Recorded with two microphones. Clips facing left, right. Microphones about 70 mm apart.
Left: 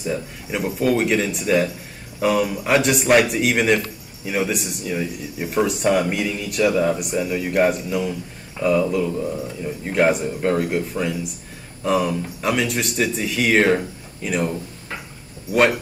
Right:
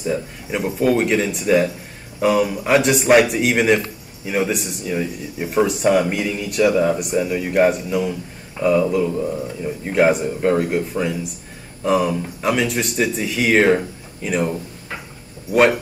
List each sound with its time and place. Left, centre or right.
0.0 s speech: centre